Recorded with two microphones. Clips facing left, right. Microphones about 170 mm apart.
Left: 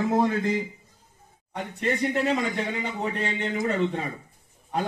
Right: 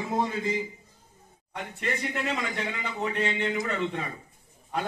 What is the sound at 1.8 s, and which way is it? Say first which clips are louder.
A man's voice: left 6 dB; 30° left (ahead or behind).